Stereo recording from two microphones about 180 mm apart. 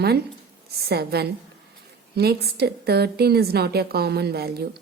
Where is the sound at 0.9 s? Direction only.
65° right (ahead or behind).